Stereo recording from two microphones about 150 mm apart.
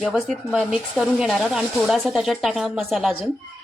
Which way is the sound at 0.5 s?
5° right (ahead or behind).